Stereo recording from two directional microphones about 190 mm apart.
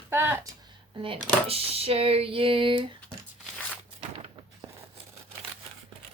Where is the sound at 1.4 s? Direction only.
30° right (ahead or behind).